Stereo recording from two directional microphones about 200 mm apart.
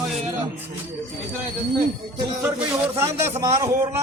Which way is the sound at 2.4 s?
5° right (ahead or behind).